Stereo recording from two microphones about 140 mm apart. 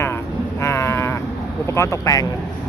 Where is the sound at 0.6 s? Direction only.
20° left (ahead or behind).